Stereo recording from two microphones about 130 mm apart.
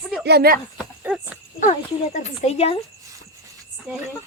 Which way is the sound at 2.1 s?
65° left (ahead or behind).